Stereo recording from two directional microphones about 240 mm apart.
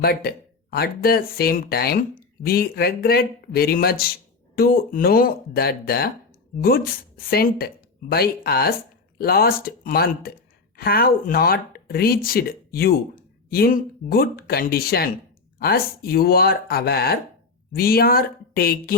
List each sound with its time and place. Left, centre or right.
0.0 s speech: left